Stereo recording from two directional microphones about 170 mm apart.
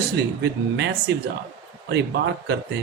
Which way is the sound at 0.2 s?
80° right.